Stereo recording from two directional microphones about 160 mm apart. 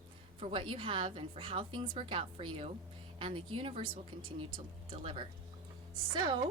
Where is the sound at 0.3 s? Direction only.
35° right (ahead or behind).